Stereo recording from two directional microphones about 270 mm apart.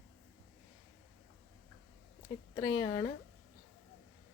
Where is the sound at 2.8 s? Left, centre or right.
Centre.